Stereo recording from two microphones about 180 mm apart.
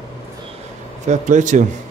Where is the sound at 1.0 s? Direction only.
40° right (ahead or behind).